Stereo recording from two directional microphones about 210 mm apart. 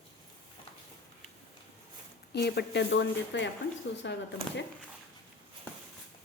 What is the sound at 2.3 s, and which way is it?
Speech, 50° left (ahead or behind).